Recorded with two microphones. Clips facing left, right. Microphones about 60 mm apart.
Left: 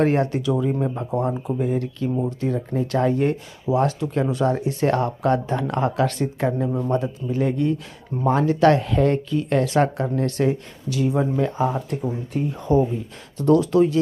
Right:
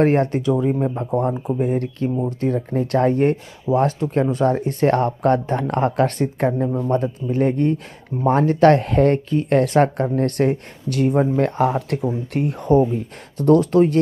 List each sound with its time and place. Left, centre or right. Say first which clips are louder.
0.0 s speech: right 3 dB; right
0.7 s speech: right 3 dB; centre
1.6 s speech: right 3 dB; right
11.9 s speech: right 3 dB; right
13.4 s speech: right 2 dB; right